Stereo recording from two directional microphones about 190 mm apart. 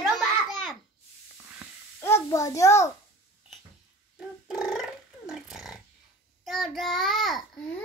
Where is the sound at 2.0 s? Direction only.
15° left (ahead or behind).